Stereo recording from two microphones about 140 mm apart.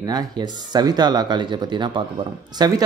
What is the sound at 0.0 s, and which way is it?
A man's voice, 30° right (ahead or behind).